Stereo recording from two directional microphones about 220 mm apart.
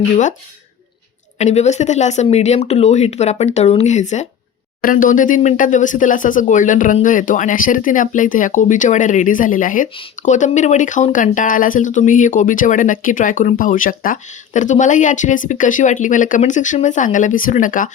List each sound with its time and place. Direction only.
1.4 s speech: 30° left (ahead or behind)